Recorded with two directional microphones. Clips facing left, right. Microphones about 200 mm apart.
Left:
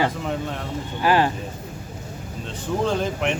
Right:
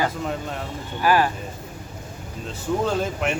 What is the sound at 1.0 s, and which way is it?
Speech, 25° left (ahead or behind).